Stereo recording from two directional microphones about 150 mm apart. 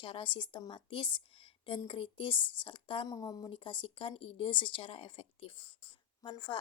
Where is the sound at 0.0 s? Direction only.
35° left (ahead or behind).